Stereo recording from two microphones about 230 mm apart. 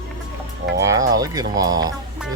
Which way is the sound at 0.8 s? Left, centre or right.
Centre.